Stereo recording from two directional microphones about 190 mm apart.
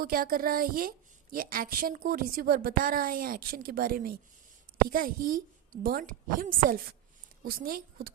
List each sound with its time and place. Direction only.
0.0 s a woman's voice: 50° right (ahead or behind)